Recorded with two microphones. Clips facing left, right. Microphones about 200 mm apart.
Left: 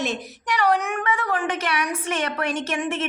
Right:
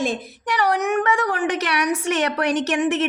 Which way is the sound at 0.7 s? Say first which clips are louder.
Right 3 dB; 75° right (ahead or behind).